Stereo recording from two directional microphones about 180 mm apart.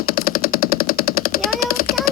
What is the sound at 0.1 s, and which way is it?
Jackhammer, 55° left (ahead or behind).